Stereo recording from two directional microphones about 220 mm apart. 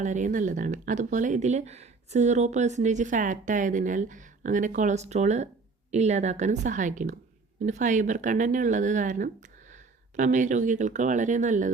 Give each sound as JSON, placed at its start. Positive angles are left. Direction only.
{"t": 0.0, "sound": "speech", "side_deg": -35}